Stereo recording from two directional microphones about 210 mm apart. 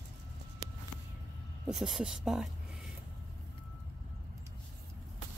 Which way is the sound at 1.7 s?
Centre (ahead or behind).